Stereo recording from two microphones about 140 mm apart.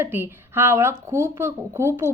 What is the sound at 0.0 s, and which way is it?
Speech, 15° right (ahead or behind).